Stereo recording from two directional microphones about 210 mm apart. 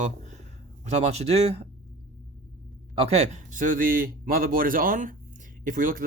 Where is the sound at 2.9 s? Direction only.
30° right (ahead or behind).